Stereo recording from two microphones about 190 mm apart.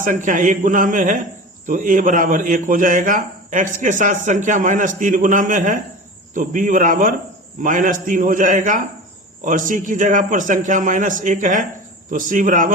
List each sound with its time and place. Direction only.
0.0 s a man's voice: 40° right (ahead or behind)